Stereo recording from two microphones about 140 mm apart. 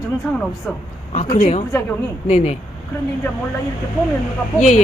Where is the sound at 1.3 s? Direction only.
55° left (ahead or behind).